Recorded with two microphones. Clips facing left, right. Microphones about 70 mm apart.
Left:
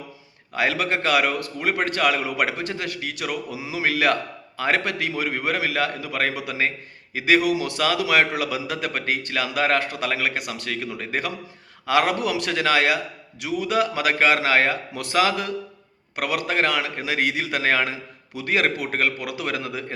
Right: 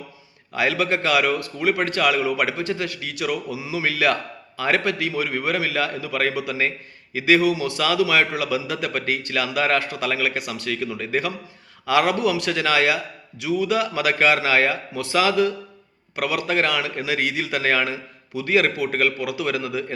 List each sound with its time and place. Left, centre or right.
0.5 s a man's voice: left